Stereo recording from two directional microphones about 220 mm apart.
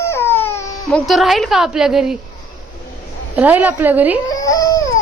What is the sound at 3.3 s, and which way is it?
Speech, 5° right (ahead or behind).